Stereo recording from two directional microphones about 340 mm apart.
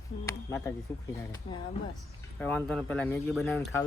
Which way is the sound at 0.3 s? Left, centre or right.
Centre.